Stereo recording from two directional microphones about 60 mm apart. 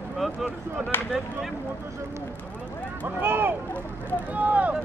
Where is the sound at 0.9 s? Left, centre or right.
Left.